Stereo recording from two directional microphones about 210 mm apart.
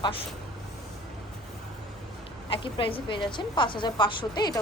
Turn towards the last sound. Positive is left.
turn(degrees=20)  # may be behind; listen again after turning